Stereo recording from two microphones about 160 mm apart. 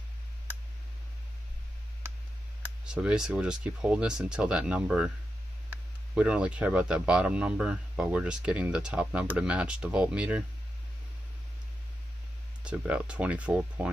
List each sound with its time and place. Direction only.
2.8 s speech: 5° right (ahead or behind)
12.6 s speech: 5° right (ahead or behind)